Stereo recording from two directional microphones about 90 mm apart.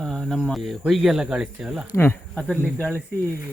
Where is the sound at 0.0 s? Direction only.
5° left (ahead or behind).